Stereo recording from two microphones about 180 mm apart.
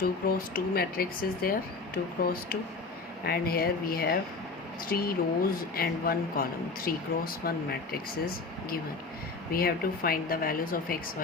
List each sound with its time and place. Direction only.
0.0 s speech: 55° left (ahead or behind)